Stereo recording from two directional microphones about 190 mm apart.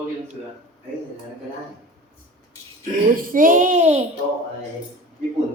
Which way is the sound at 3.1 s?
45° right (ahead or behind).